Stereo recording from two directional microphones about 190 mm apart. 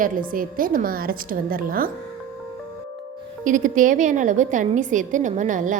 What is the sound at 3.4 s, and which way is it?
A woman's voice, 45° right (ahead or behind).